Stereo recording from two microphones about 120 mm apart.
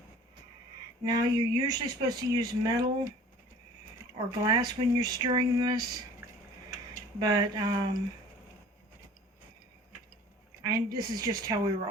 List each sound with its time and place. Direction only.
1.0 s speech: 35° right (ahead or behind)
4.3 s speech: 35° right (ahead or behind)
10.6 s speech: 35° right (ahead or behind)